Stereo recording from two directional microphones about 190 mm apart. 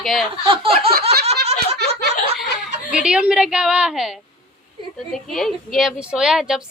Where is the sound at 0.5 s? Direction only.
30° right (ahead or behind).